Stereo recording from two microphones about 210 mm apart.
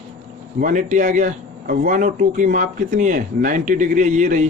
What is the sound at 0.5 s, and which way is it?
Speech, 40° right (ahead or behind).